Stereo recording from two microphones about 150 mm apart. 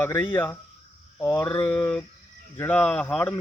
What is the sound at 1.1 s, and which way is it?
Mantra, 25° left (ahead or behind).